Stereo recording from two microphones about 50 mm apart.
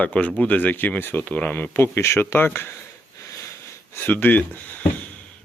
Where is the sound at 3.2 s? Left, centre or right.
Left.